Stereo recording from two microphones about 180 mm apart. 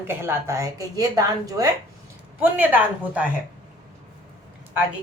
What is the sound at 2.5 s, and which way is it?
Speech, 10° right (ahead or behind).